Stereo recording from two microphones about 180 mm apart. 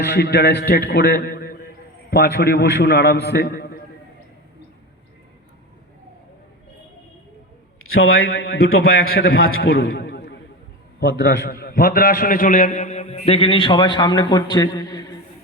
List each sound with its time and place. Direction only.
0.0 s a man's voice: 65° left (ahead or behind)
8.0 s a man's voice: 75° left (ahead or behind); by 15.0 s 20° left (ahead or behind)